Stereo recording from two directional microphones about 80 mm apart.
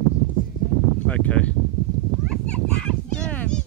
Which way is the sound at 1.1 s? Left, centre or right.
Centre.